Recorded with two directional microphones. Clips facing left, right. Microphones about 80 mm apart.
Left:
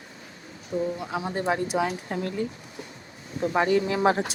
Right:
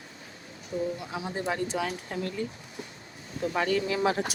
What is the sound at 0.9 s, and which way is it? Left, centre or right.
Speech, left.